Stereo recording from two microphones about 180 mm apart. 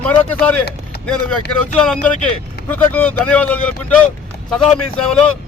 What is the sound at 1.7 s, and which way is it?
A man's voice, 5° left (ahead or behind).